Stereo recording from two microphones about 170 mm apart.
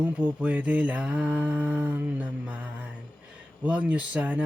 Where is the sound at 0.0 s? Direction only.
10° right (ahead or behind).